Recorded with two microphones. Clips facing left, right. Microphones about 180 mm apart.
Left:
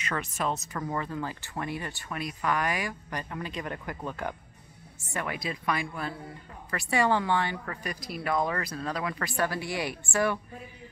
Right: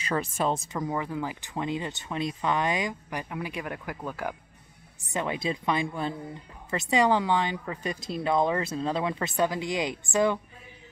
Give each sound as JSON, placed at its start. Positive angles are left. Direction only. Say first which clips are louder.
{"t": 0.0, "sound": "speech", "louder": "right 4 dB", "side_deg": -30}
{"t": 0.7, "sound": "speech", "louder": "right 2 dB", "side_deg": -15}
{"t": 5.1, "sound": "a woman's voice", "louder": "right 4 dB", "side_deg": -25}